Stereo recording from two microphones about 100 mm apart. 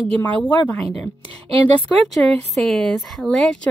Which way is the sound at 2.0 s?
5° left (ahead or behind).